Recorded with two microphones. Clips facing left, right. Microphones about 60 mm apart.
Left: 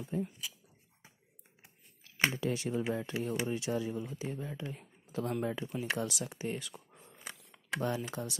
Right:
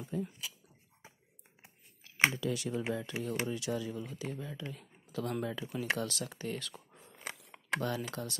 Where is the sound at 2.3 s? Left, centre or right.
Left.